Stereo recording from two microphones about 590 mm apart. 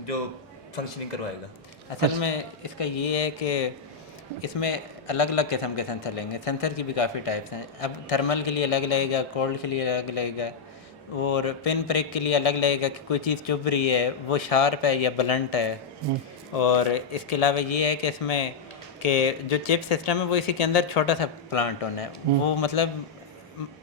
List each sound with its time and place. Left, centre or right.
2.0 s speech: left
4.6 s a man's voice: left
16.6 s speech: left